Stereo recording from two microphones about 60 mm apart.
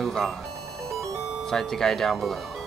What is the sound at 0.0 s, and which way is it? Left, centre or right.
Music, centre.